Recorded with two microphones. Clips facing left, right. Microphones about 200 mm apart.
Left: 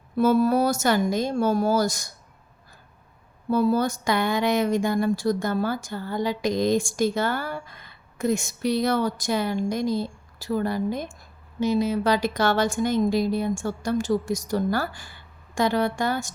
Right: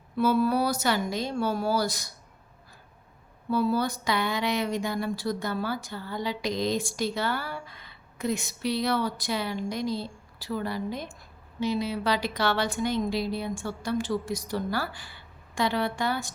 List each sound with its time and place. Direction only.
0.2 s speech: 45° left (ahead or behind)
3.5 s speech: 45° left (ahead or behind)